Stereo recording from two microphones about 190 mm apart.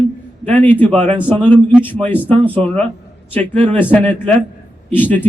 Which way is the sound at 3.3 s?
5° left (ahead or behind).